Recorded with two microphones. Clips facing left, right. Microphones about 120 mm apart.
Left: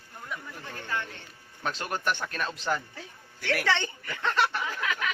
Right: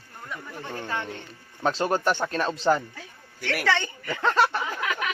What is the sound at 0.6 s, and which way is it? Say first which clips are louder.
A man's voice: right 4 dB; 30° right (ahead or behind).